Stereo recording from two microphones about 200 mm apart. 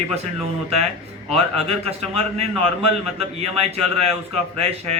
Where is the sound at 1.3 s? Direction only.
30° right (ahead or behind).